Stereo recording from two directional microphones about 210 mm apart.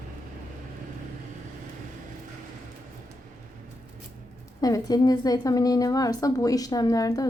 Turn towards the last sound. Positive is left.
turn(degrees=15)  # may be behind; listen again after turning